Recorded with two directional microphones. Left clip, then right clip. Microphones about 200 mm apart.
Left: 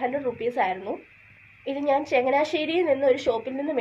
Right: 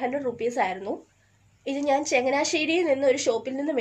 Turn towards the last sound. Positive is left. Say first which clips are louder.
# even
turn(degrees=-40)  # may be behind; listen again after turning